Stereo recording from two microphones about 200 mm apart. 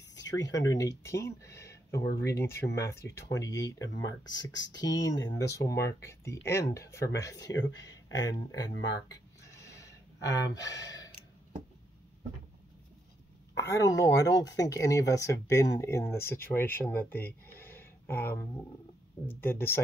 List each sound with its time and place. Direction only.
0.1 s speech: 15° left (ahead or behind)
9.4 s a sound: 15° left (ahead or behind)
10.8 s gasp: 20° left (ahead or behind)
13.6 s speech: 15° left (ahead or behind)